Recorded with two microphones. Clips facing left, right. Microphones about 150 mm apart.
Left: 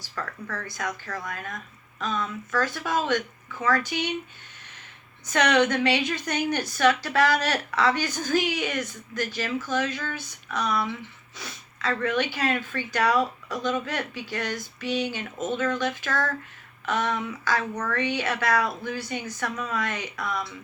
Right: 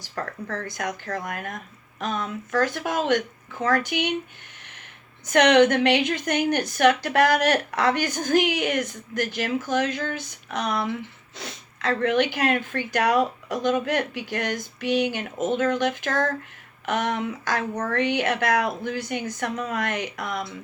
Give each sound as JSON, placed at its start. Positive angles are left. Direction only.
{"t": 0.2, "sound": "a woman's voice", "side_deg": -45}
{"t": 5.2, "sound": "a woman's voice", "side_deg": -55}